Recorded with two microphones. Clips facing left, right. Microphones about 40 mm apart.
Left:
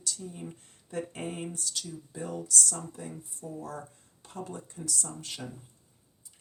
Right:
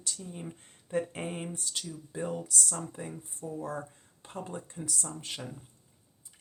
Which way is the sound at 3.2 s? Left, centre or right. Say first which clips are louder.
Right 3 dB; right.